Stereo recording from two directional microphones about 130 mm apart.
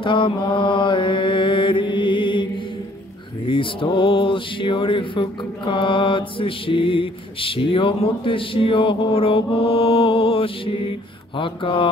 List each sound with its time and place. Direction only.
0.0 s mantra: 40° left (ahead or behind)